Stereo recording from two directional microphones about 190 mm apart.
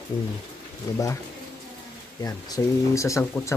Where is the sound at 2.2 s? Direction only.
15° left (ahead or behind).